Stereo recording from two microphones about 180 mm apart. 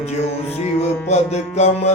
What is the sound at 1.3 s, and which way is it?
Speech, 40° left (ahead or behind).